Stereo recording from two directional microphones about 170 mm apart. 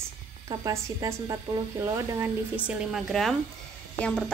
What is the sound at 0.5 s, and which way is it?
Speech, 15° right (ahead or behind).